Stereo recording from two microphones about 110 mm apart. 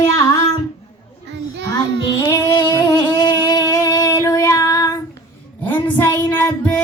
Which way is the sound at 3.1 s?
40° left (ahead or behind).